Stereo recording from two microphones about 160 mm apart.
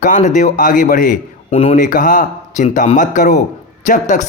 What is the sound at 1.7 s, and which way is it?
A man's voice, 55° left (ahead or behind).